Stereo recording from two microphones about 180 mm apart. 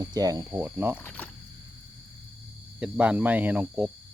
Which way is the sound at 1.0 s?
10° left (ahead or behind).